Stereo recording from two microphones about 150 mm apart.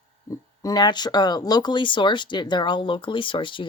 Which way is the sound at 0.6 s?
30° left (ahead or behind).